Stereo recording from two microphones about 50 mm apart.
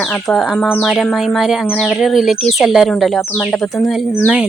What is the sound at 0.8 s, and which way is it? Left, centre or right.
Speech, centre.